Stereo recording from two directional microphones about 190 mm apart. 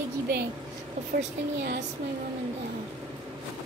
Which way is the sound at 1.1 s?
60° right (ahead or behind).